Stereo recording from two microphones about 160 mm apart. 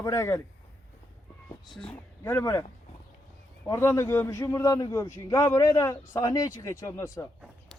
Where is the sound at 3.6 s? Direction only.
15° left (ahead or behind).